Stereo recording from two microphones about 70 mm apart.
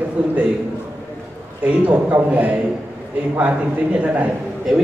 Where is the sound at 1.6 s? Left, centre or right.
Right.